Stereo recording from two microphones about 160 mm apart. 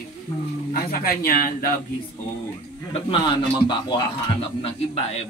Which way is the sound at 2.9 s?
30° left (ahead or behind).